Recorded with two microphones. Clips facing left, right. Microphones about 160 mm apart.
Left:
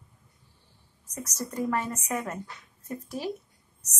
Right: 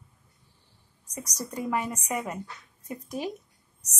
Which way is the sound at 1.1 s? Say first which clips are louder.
Left 1 dB; 10° right (ahead or behind).